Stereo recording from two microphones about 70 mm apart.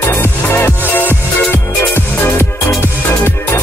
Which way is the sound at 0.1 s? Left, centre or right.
Left.